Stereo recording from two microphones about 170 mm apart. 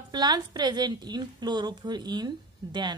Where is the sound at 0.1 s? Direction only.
25° right (ahead or behind).